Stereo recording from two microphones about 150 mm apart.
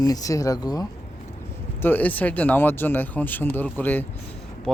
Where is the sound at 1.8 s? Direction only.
10° left (ahead or behind).